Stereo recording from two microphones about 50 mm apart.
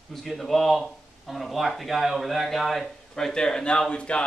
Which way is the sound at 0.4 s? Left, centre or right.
Centre.